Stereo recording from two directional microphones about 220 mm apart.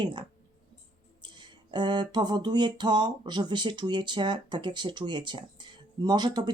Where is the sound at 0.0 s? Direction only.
20° right (ahead or behind).